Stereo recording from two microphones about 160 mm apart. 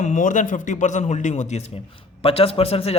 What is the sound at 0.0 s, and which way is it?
A man's voice, 50° left (ahead or behind).